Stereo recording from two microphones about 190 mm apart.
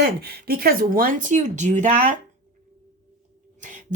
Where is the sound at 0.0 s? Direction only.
55° right (ahead or behind); by 2.1 s 40° right (ahead or behind).